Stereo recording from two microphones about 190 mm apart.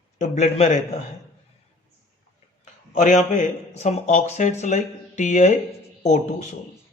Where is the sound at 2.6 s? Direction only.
40° left (ahead or behind).